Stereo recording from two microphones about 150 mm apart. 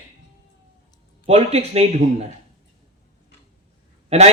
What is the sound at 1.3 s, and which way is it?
Speech, 45° right (ahead or behind).